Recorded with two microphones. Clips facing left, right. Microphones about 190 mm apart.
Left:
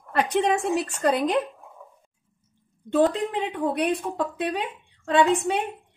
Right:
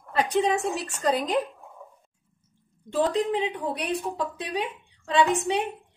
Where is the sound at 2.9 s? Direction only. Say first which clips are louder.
Left 2 dB; 55° left (ahead or behind).